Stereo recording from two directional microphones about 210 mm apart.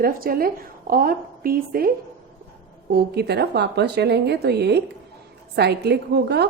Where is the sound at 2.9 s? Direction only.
50° right (ahead or behind).